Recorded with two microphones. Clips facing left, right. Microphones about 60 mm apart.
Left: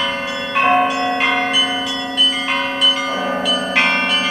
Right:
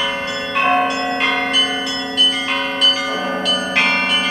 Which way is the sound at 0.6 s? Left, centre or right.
Centre.